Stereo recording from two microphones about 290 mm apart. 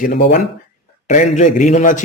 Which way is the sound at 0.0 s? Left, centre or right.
Left.